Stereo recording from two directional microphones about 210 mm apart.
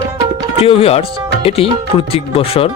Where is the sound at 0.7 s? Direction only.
30° left (ahead or behind).